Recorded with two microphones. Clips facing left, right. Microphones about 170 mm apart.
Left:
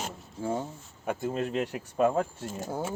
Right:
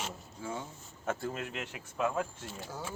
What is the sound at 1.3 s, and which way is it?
Speech, 35° left (ahead or behind).